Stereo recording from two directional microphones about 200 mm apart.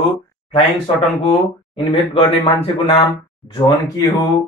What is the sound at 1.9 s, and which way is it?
Speech, 30° left (ahead or behind).